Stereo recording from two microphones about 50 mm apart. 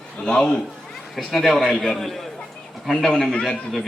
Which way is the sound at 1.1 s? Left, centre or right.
Centre.